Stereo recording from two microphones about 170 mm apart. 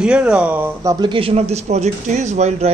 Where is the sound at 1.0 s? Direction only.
30° right (ahead or behind).